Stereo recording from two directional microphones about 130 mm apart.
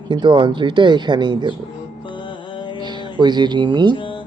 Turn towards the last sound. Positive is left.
turn(degrees=40)  # may be behind; listen again after turning